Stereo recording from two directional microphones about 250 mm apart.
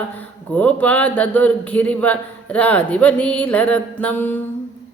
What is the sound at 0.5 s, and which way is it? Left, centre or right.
A man's voice, centre.